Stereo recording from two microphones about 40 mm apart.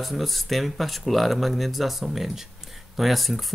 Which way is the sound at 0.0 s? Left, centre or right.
Centre.